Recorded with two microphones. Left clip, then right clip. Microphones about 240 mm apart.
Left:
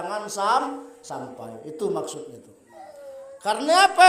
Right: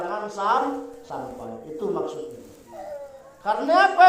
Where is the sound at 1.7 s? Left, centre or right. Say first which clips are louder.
Even; left.